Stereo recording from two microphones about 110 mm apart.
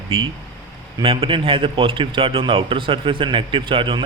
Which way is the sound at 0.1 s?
55° right (ahead or behind).